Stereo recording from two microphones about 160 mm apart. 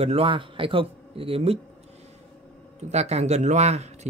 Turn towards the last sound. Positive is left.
turn(degrees=-45)  # may be behind; listen again after turning